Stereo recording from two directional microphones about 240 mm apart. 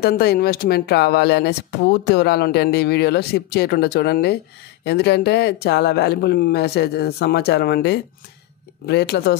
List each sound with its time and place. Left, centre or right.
0.0 s speech: left